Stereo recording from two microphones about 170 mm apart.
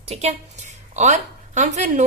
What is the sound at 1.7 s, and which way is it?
Speech, 45° right (ahead or behind).